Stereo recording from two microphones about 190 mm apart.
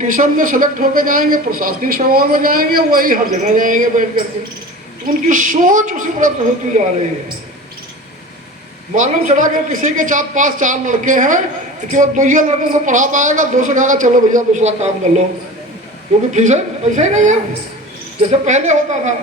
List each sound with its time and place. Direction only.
0.0 s a man's voice: 45° right (ahead or behind)
9.0 s a man's voice: 40° right (ahead or behind)
16.3 s a man's voice: 40° right (ahead or behind)